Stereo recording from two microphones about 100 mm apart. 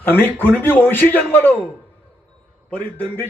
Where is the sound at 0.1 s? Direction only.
20° left (ahead or behind).